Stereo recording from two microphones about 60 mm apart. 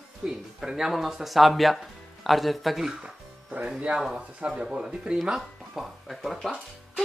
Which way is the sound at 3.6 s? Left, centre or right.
Centre.